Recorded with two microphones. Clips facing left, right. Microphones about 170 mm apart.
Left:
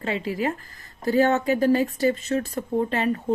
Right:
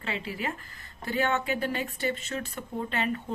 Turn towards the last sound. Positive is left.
turn(degrees=40)  # may be behind; listen again after turning